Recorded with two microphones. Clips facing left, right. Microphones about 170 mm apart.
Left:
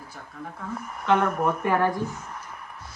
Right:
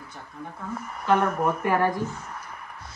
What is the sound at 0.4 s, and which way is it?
Speech, centre (ahead or behind).